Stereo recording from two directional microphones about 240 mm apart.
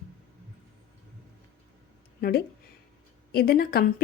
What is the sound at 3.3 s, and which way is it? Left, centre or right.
Speech, left.